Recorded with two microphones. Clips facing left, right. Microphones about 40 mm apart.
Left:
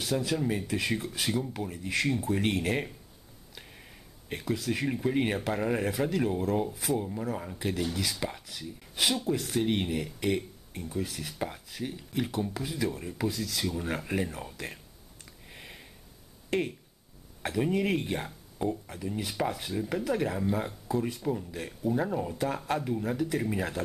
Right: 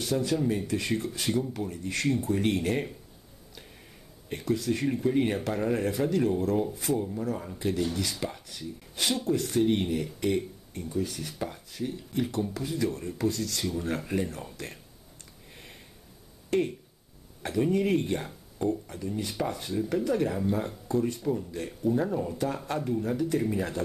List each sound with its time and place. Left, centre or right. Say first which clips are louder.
0.0 s speech: right 2 dB; centre
4.3 s speech: right 3 dB; centre
15.5 s sniff: left 2 dB; centre
16.4 s a sound: right 3 dB; centre
17.5 s speech: right 2 dB; centre